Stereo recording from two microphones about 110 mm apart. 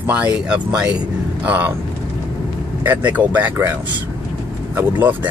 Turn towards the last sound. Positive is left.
turn(degrees=-15)  # may be behind; listen again after turning